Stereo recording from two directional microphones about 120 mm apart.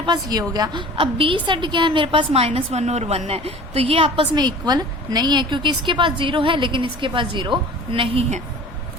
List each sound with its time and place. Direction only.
0.0 s a woman's voice: 35° right (ahead or behind)